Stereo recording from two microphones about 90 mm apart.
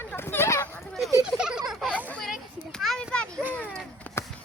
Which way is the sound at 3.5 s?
15° left (ahead or behind).